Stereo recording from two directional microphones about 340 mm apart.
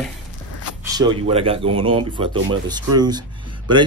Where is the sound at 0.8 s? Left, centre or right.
Centre.